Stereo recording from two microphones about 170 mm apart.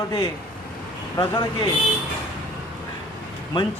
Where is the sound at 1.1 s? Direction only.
25° left (ahead or behind).